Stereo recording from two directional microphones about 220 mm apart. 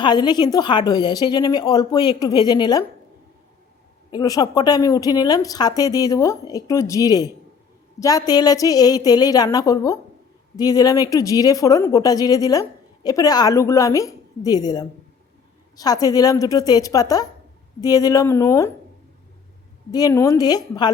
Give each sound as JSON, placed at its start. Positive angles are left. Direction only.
{"t": 0.0, "sound": "a woman's voice", "side_deg": 20}
{"t": 4.1, "sound": "speech", "side_deg": 20}
{"t": 19.9, "sound": "speech", "side_deg": 15}